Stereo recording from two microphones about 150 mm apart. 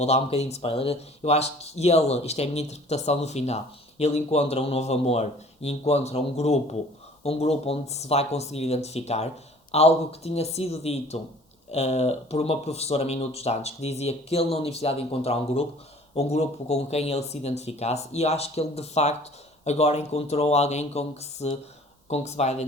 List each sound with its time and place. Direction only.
0.0 s speech: 45° left (ahead or behind)